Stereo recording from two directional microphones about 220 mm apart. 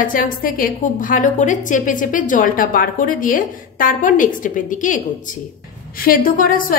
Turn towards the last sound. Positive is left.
turn(degrees=40)  # may be behind; listen again after turning